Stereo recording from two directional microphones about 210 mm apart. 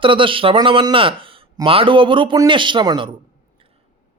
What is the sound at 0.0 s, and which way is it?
Speech, 25° right (ahead or behind).